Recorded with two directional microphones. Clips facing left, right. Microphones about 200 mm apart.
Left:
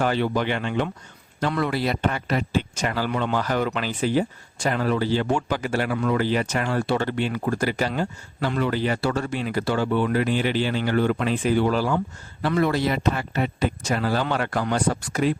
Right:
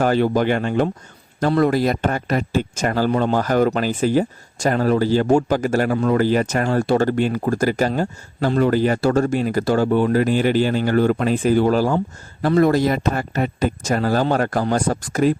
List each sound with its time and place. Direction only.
0.0 s a man's voice: 45° right (ahead or behind)